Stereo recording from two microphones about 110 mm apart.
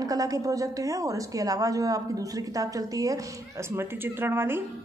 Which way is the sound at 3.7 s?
20° right (ahead or behind).